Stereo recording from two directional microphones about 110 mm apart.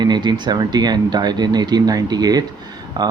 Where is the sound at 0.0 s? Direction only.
40° right (ahead or behind).